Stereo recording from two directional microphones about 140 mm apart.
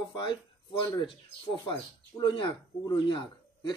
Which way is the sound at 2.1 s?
30° left (ahead or behind).